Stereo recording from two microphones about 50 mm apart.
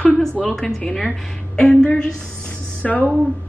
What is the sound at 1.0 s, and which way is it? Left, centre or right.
A woman's voice, left.